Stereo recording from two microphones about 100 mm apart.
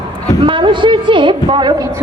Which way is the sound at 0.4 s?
55° right (ahead or behind).